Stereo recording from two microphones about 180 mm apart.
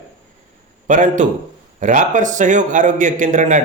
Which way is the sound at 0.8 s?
45° right (ahead or behind).